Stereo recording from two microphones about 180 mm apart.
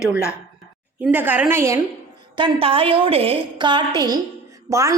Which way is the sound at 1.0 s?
10° right (ahead or behind).